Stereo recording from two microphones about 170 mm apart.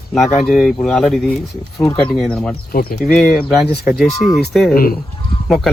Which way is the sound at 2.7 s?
60° left (ahead or behind).